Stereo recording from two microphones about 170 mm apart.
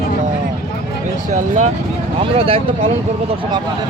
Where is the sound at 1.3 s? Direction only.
45° right (ahead or behind).